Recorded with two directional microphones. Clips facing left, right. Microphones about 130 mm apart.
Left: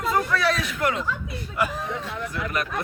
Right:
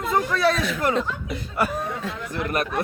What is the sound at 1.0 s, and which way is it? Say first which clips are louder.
Speech: right 2 dB; 90° right.